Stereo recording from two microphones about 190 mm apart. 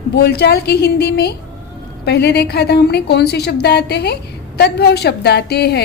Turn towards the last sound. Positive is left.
turn(degrees=60)  # may be behind; listen again after turning